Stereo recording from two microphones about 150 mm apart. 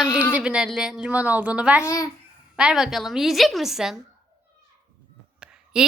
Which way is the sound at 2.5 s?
5° right (ahead or behind).